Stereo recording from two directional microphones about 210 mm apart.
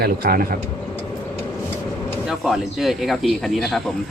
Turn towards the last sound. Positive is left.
turn(degrees=0)  # may be behind; listen again after turning